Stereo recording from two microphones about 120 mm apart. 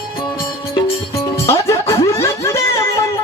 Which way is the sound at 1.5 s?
25° left (ahead or behind).